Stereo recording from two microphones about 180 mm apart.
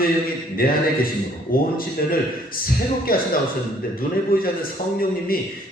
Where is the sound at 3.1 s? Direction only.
55° left (ahead or behind).